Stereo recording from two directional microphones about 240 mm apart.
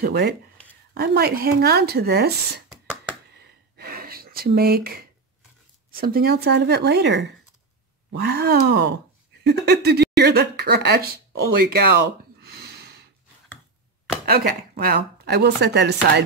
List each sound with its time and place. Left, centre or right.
0.0 s speech: right
3.3 s a sound: right
5.9 s speech: right
12.4 s gasp: right
14.2 s speech: right